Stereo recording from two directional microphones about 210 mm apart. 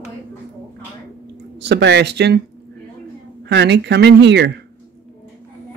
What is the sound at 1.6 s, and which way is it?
Speech, 55° right (ahead or behind).